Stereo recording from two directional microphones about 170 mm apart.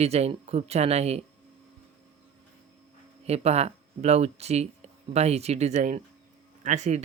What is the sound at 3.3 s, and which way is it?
Speech, 40° right (ahead or behind).